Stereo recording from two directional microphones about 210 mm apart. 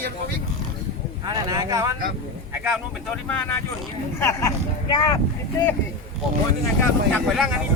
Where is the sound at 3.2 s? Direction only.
10° left (ahead or behind).